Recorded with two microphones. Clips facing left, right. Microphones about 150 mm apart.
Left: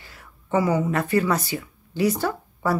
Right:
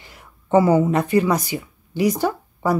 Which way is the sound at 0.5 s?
30° right (ahead or behind).